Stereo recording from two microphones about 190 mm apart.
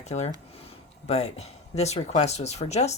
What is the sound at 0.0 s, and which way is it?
Speech, 35° left (ahead or behind).